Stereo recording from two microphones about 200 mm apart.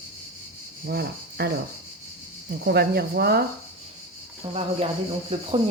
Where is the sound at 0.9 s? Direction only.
50° right (ahead or behind).